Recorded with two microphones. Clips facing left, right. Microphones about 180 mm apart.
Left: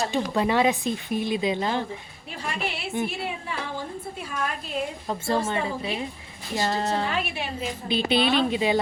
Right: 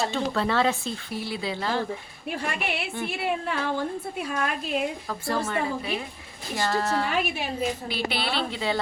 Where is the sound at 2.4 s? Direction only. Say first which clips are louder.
Left 1 dB; 60° right (ahead or behind).